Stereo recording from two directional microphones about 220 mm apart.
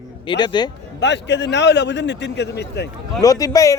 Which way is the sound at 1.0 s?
55° left (ahead or behind).